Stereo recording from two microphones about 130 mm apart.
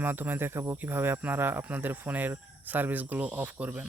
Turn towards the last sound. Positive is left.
turn(degrees=-10)  # may be behind; listen again after turning